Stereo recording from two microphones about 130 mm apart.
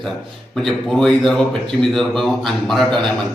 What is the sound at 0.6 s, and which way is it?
Speech, 5° left (ahead or behind).